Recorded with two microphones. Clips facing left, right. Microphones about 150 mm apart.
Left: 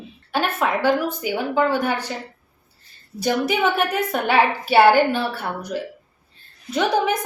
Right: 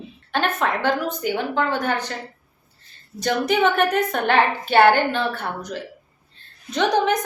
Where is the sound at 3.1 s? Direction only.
10° left (ahead or behind).